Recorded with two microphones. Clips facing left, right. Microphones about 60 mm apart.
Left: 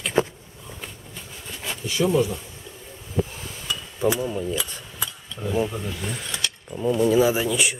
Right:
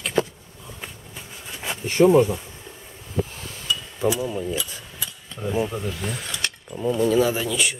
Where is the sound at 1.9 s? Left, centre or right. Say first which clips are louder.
Right 6 dB; right.